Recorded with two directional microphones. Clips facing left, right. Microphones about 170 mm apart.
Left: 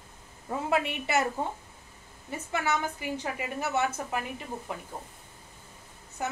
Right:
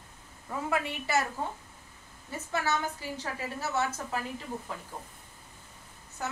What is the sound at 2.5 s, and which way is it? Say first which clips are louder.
Speech: left 1 dB; 15° left (ahead or behind).